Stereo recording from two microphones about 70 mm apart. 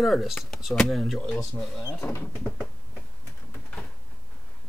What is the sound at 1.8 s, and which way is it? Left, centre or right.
Speech, left.